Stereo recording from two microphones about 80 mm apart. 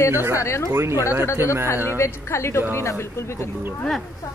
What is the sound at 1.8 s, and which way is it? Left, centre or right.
Speech, left.